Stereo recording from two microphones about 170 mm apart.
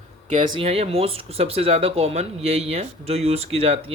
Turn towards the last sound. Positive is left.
turn(degrees=-35)  # may be behind; listen again after turning